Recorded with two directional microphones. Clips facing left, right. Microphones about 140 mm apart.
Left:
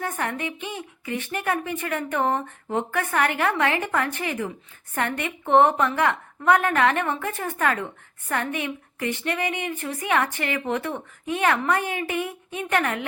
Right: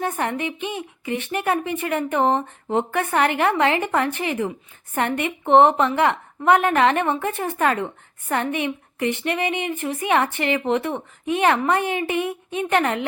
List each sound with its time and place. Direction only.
0.0 s a woman's voice: 20° right (ahead or behind)